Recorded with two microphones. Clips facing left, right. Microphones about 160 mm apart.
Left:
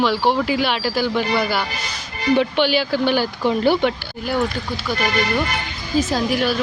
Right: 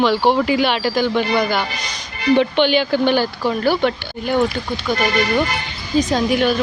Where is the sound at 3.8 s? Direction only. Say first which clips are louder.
Right 2 dB; 5° left (ahead or behind).